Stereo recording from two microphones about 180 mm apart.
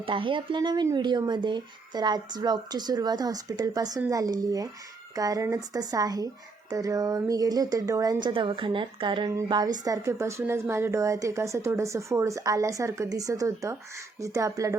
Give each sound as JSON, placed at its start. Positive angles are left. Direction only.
{"t": 0.0, "sound": "speech", "side_deg": -30}